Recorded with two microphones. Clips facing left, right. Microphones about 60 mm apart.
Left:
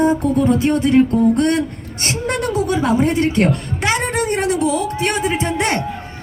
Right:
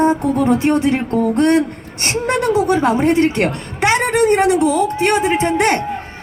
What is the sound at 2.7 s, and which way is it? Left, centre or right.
A woman's voice, right.